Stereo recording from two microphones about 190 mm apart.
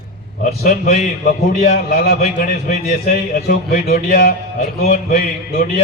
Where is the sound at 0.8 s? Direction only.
45° left (ahead or behind).